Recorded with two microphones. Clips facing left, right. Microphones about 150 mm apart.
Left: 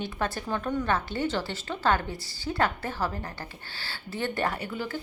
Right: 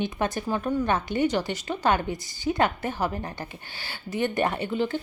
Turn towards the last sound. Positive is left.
turn(degrees=-25)  # may be behind; listen again after turning